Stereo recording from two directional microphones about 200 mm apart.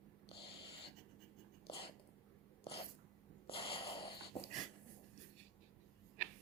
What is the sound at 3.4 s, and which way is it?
Wheeze, 25° left (ahead or behind).